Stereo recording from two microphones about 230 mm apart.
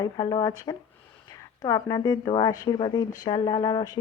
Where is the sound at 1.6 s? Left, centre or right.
Centre.